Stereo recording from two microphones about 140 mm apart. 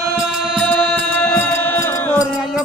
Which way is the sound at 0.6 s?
10° left (ahead or behind).